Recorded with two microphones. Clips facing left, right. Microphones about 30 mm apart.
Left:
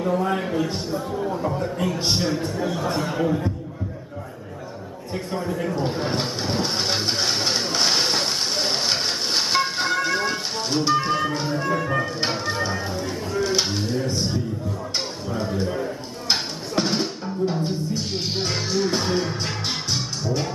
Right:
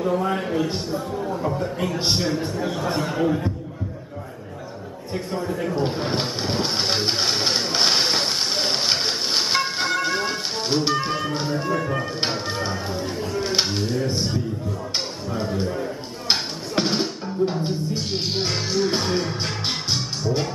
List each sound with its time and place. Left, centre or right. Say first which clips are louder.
0.0 s speech: even; centre
5.1 s speech: even; centre
5.8 s a sound: right 1 dB; centre
11.0 s music: left 2 dB; centre
11.6 s speech: even; centre
12.3 s music: left 1 dB; centre
13.4 s a sound: left 1 dB; right
13.7 s speech: right 1 dB; centre
16.3 s music: right 1 dB; centre
17.6 s speech: right 1 dB; centre
19.1 s music: even; centre